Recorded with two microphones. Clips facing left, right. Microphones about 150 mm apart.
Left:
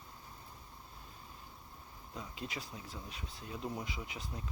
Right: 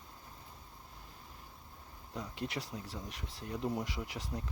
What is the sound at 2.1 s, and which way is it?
Speech, 75° right (ahead or behind).